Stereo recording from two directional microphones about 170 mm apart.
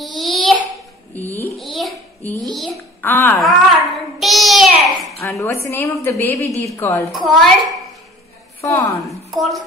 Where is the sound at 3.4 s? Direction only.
Centre (ahead or behind).